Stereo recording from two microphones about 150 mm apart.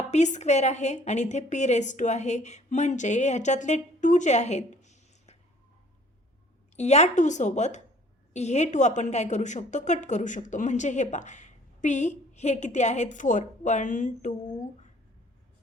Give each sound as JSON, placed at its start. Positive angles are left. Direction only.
{"t": 0.1, "sound": "a woman's voice", "side_deg": 50}
{"t": 6.7, "sound": "a woman's voice", "side_deg": 50}